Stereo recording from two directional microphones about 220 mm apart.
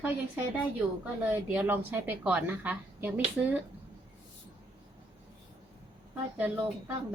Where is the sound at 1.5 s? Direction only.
10° right (ahead or behind).